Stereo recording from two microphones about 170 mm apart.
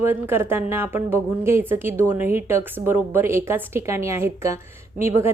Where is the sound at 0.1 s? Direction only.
15° right (ahead or behind).